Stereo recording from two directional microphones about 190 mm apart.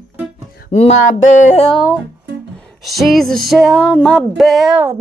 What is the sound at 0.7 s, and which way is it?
Music, 35° left (ahead or behind).